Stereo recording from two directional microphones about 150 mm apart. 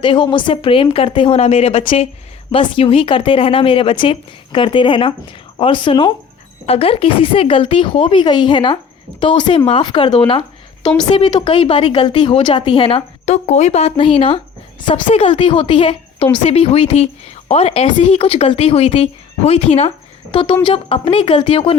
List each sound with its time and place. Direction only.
0.0 s speech: 30° left (ahead or behind); by 19.9 s 50° left (ahead or behind)
20.3 s speech: 35° left (ahead or behind)